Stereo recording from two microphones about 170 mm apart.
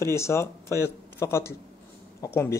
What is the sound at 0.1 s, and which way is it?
Speech, 15° left (ahead or behind).